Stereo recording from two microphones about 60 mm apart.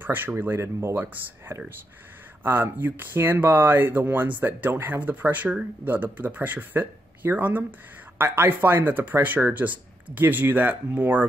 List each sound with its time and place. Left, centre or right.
0.0 s speech: right